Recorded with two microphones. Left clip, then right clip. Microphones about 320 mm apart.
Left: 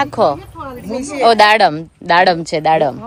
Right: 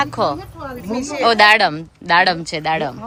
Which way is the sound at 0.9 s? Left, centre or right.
Centre.